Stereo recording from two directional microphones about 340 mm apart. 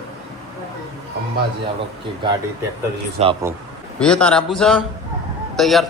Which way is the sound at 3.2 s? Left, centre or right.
Centre.